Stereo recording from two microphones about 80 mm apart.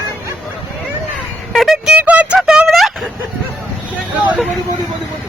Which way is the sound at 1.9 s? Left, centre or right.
Centre.